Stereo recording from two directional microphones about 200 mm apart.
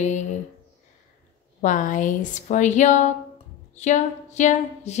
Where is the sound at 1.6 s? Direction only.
40° left (ahead or behind).